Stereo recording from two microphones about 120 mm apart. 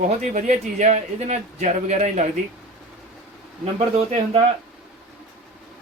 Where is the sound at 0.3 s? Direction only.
90° right.